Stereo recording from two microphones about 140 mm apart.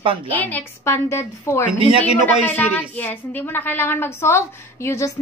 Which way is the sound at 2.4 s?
10° left (ahead or behind).